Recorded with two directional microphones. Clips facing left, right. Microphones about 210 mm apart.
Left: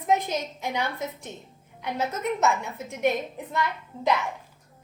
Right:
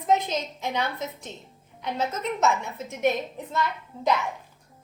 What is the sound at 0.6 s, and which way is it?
A woman's voice, 15° left (ahead or behind).